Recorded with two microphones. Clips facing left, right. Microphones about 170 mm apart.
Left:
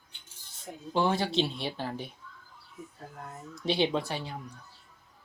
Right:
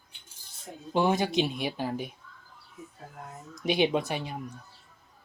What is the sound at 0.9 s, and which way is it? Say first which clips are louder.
Speech: right 2 dB; 15° right (ahead or behind).